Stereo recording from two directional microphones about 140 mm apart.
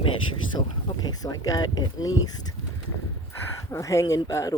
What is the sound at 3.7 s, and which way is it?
Speech, 20° left (ahead or behind).